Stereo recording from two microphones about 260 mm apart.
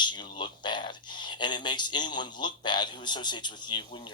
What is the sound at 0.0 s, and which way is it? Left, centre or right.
A man's voice, centre.